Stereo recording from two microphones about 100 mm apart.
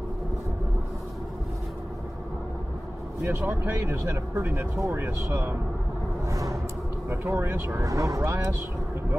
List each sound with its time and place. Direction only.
3.2 s speech: 25° right (ahead or behind)
6.2 s a sound: 35° right (ahead or behind)
7.1 s speech: 20° right (ahead or behind)
7.8 s speech: 35° right (ahead or behind)